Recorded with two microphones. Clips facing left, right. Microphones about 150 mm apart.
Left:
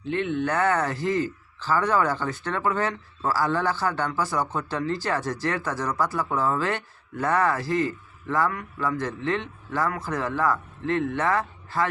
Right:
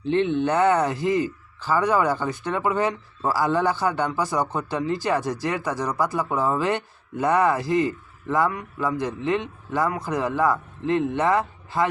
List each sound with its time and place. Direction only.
0.0 s speech: 25° right (ahead or behind)